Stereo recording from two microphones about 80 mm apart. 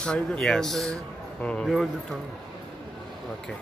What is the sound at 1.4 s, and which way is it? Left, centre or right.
Speech, centre.